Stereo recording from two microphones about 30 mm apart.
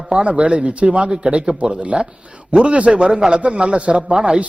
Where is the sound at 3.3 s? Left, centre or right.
Right.